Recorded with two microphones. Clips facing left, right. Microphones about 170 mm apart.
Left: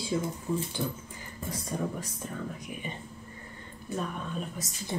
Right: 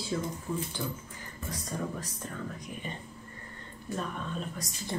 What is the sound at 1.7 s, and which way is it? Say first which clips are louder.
Speech: left 3 dB; 15° left (ahead or behind).